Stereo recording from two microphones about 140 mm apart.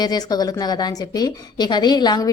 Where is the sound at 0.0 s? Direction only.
30° left (ahead or behind).